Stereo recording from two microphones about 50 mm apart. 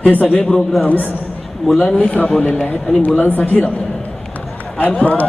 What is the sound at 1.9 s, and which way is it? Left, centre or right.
Speech, left.